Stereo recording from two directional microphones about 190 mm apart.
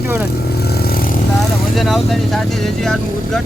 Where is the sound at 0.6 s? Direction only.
55° left (ahead or behind).